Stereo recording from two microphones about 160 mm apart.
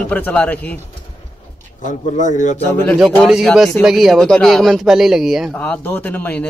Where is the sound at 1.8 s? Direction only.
50° left (ahead or behind).